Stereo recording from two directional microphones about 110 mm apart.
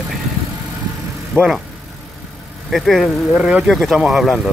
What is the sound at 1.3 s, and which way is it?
Speech, centre (ahead or behind).